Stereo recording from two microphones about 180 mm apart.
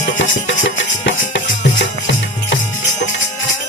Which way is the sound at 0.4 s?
90° left.